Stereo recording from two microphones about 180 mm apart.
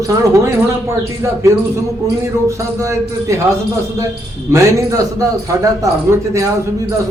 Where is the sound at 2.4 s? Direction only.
15° right (ahead or behind).